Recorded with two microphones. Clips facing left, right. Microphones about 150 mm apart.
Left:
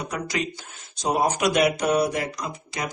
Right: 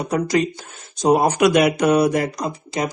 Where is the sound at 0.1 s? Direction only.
40° right (ahead or behind).